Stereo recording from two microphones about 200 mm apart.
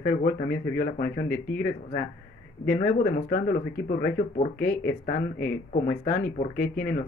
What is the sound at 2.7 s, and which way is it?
Speech, 40° left (ahead or behind).